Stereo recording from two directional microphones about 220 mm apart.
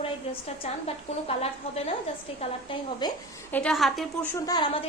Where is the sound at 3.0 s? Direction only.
20° left (ahead or behind).